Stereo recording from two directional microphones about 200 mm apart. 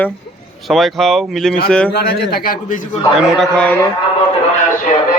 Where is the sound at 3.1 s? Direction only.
Centre (ahead or behind).